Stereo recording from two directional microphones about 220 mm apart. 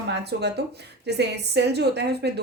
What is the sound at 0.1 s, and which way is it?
Speech, 50° right (ahead or behind).